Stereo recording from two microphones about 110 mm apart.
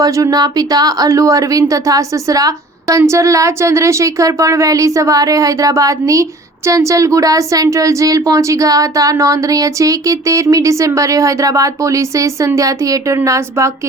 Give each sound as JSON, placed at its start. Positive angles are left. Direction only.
{"t": 0.0, "sound": "a woman's voice", "side_deg": -30}